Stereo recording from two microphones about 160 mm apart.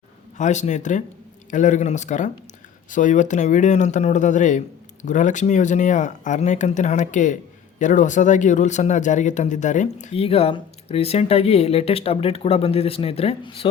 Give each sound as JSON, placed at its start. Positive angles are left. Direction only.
{"t": 0.3, "sound": "speech", "side_deg": 50}